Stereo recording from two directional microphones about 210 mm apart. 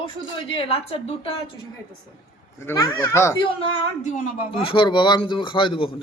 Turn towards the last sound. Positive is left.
turn(degrees=25)  # may be behind; listen again after turning